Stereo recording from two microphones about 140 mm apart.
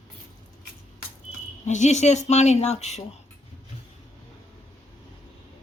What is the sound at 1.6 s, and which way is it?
Speech, 60° left (ahead or behind).